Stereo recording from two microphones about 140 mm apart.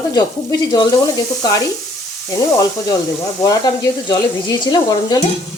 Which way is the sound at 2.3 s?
25° left (ahead or behind).